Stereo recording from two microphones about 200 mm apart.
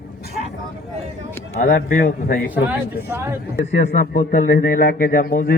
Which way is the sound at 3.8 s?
40° left (ahead or behind).